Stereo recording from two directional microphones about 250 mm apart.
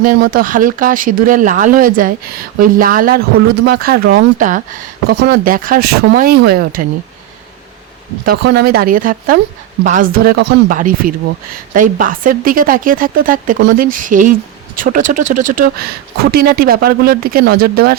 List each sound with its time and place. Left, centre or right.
0.0 s speech: right
8.2 s speech: right